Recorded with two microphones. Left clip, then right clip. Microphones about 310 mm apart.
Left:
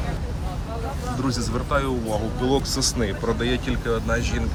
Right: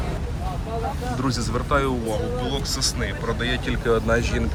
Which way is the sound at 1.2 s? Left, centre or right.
Centre.